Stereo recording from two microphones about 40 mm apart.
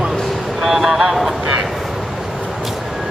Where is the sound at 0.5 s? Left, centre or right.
Centre.